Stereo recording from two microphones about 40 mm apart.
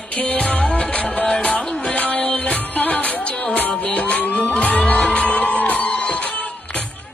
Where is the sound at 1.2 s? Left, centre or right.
Centre.